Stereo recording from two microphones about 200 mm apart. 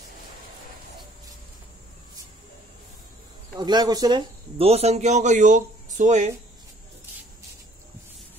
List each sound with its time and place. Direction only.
3.5 s a man's voice: 20° right (ahead or behind); by 6.3 s 35° right (ahead or behind)